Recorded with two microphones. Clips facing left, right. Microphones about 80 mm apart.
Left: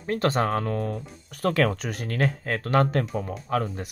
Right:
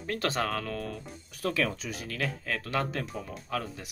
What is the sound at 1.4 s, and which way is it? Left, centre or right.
Speech, left.